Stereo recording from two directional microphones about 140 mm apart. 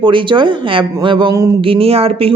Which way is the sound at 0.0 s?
35° right (ahead or behind).